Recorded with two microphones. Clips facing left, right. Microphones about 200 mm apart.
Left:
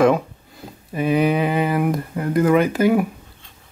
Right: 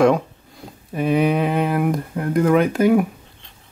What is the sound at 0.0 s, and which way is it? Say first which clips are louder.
Speech: even; centre (ahead or behind).